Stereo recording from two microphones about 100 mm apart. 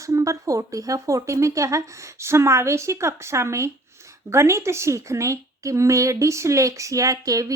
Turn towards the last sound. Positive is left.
turn(degrees=-35)  # may be behind; listen again after turning